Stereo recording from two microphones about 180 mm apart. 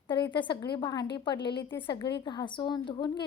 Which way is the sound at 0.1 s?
25° left (ahead or behind).